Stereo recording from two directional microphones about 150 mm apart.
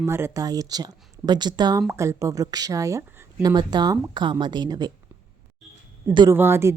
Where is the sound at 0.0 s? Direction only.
20° right (ahead or behind).